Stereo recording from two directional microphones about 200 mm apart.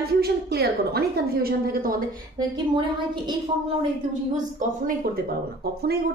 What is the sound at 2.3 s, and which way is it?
Speech, 20° right (ahead or behind).